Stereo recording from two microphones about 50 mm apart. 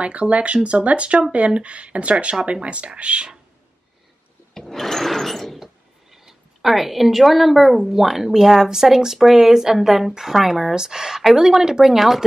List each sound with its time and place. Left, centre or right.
0.0 s speech: right
4.6 s sewing machine: centre
6.1 s a woman's voice: centre